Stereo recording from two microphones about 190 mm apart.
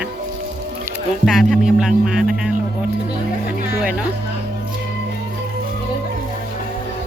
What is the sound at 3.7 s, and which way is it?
Music, 5° right (ahead or behind).